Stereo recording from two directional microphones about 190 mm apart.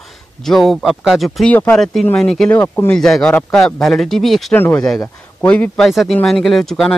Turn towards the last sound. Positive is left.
turn(degrees=0)  # may be behind; listen again after turning